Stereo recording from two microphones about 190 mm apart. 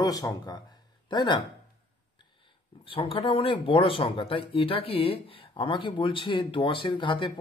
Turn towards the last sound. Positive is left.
turn(degrees=25)  # may be behind; listen again after turning